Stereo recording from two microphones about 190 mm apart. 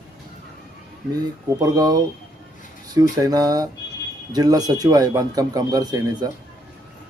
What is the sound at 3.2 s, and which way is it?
A man's voice, 20° right (ahead or behind).